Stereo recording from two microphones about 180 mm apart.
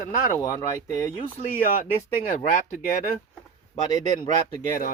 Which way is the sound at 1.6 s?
45° left (ahead or behind).